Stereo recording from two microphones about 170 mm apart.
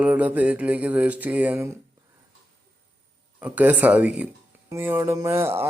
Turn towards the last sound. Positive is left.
turn(degrees=-15)  # may be behind; listen again after turning